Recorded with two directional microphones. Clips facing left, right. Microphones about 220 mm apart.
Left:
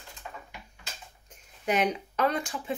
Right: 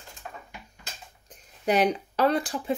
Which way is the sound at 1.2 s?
35° right (ahead or behind).